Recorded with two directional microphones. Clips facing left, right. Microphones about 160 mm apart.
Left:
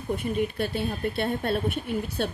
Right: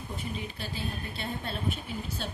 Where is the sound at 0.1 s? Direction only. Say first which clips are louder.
Left 12 dB; 60° left (ahead or behind).